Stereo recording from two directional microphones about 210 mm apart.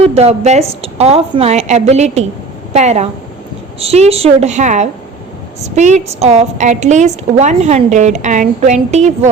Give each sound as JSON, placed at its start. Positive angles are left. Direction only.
{"t": 0.0, "sound": "a woman's voice", "side_deg": -30}